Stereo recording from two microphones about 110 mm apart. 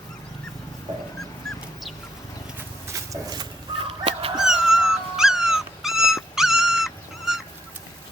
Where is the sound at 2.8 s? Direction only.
30° right (ahead or behind).